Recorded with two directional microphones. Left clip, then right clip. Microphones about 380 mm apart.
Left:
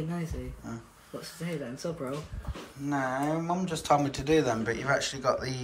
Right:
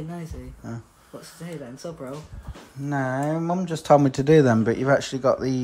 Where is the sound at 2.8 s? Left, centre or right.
Right.